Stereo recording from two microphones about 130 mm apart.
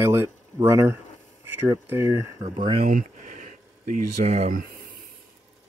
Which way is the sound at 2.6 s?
45° right (ahead or behind).